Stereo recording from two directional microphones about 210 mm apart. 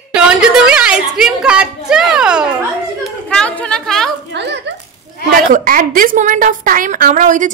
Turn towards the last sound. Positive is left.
turn(degrees=-35)  # may be behind; listen again after turning